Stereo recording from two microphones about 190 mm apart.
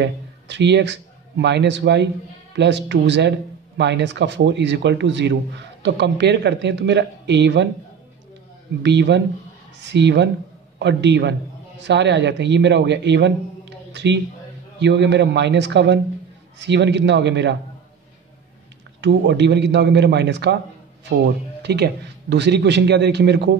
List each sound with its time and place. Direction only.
0.0 s a man's voice: 65° right (ahead or behind)
8.8 s speech: 65° right (ahead or behind)
18.9 s a man's voice: 65° right (ahead or behind)
21.6 s a man's voice: 60° right (ahead or behind)